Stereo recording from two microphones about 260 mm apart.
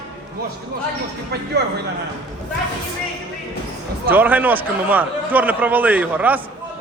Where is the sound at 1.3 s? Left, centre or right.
Right.